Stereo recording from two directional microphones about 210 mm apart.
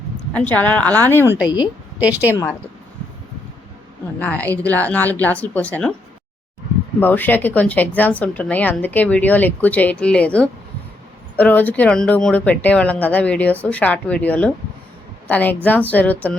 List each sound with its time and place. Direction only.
0.3 s a woman's voice: 5° left (ahead or behind)
2.0 s a woman's voice: 5° right (ahead or behind)
4.2 s speech: 10° left (ahead or behind)
7.0 s speech: 10° left (ahead or behind)